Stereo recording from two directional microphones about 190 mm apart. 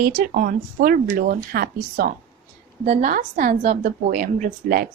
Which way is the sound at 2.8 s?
40° right (ahead or behind).